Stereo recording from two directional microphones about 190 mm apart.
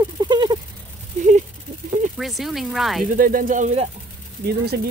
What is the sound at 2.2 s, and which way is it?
Speech, centre (ahead or behind).